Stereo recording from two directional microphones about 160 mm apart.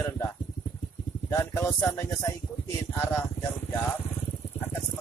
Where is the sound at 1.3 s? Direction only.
15° left (ahead or behind).